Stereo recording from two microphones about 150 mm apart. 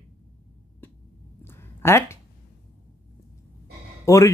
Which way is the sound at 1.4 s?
15° left (ahead or behind).